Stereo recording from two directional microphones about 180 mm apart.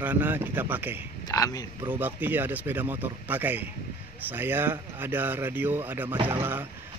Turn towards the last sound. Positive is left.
turn(degrees=-10)  # may be behind; listen again after turning